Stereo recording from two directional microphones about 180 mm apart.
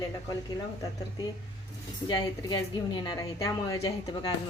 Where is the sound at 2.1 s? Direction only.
25° left (ahead or behind).